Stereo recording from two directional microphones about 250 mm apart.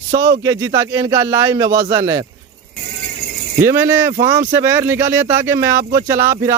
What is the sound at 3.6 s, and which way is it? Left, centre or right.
Speech, centre.